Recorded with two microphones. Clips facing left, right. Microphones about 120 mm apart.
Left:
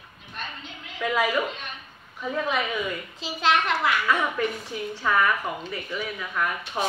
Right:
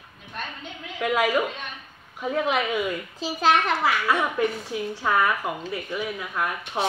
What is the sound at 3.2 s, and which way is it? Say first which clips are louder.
Speech: right 2 dB; 40° right (ahead or behind).